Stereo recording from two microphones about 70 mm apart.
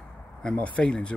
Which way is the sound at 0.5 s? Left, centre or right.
Centre.